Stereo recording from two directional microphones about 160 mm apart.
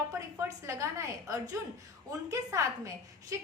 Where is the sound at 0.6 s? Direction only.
20° right (ahead or behind).